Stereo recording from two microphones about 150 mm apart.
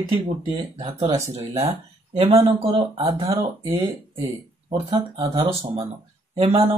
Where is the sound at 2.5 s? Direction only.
40° right (ahead or behind).